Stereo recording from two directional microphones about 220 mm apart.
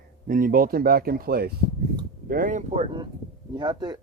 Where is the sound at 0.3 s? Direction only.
40° right (ahead or behind).